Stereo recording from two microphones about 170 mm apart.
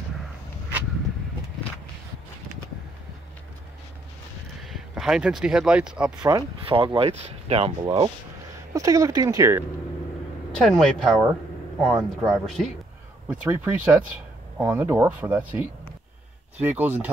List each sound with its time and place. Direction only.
4.6 s speech: centre (ahead or behind)
6.2 s speech: 25° right (ahead or behind)
8.7 s speech: 20° right (ahead or behind)
10.5 s speech: 5° left (ahead or behind)